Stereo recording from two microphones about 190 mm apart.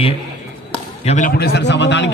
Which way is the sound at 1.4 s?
60° left (ahead or behind).